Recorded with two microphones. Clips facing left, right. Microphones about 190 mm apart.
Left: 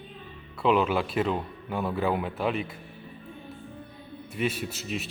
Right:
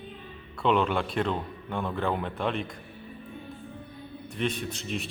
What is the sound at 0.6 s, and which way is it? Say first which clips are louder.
A man's voice: left 1 dB; 5° left (ahead or behind).